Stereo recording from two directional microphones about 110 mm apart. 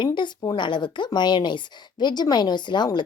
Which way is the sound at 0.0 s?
45° left (ahead or behind).